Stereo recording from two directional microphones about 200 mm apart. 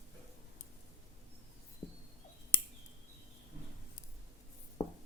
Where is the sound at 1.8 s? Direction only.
35° left (ahead or behind).